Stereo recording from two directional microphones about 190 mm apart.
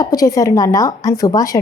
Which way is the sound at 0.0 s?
20° left (ahead or behind).